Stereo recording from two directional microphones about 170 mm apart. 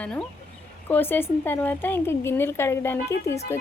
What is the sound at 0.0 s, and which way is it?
A woman's voice, 5° left (ahead or behind).